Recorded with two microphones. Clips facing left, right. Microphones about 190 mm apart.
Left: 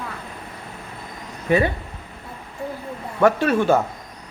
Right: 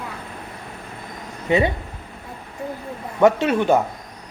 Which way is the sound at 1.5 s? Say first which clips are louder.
Even; 20° right (ahead or behind).